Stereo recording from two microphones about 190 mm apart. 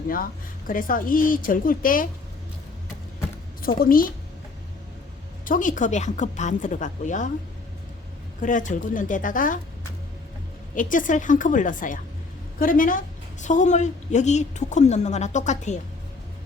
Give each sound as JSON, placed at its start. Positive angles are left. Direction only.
{"t": 0.7, "sound": "a woman's voice", "side_deg": 45}
{"t": 3.8, "sound": "a woman's voice", "side_deg": 50}
{"t": 5.5, "sound": "a woman's voice", "side_deg": 45}
{"t": 8.4, "sound": "a woman's voice", "side_deg": 40}
{"t": 10.8, "sound": "a woman's voice", "side_deg": 45}